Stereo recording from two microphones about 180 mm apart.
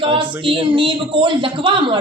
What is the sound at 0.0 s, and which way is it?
Speech, 30° right (ahead or behind).